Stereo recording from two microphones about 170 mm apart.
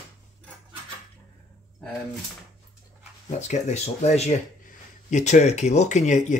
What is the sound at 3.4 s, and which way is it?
Speech, 40° left (ahead or behind).